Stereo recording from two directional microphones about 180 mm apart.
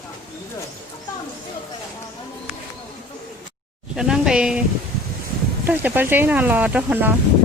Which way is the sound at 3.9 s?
5° right (ahead or behind).